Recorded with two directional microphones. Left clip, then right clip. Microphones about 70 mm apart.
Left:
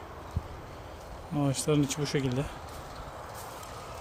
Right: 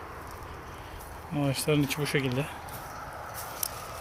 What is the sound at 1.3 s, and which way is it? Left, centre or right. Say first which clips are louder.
Speech: right 1 dB; left.